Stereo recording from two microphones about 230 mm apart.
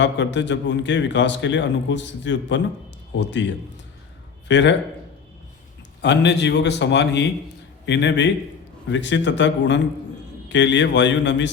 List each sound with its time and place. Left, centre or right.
0.0 s a man's voice: left
6.0 s a man's voice: left